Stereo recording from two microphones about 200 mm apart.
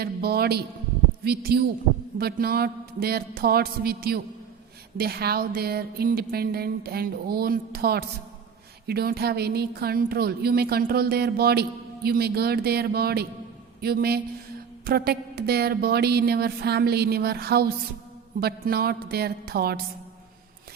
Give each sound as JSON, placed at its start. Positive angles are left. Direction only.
{"t": 0.0, "sound": "a man's voice", "side_deg": -50}